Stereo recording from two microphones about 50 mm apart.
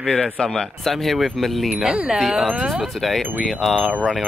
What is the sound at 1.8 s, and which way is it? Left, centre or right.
Speech, centre.